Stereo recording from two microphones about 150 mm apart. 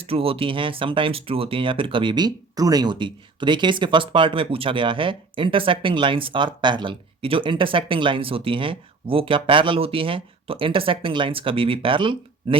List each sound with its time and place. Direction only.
0.0 s speech: 40° right (ahead or behind)